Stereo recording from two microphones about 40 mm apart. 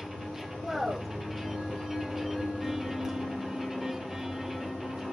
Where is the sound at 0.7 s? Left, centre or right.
Centre.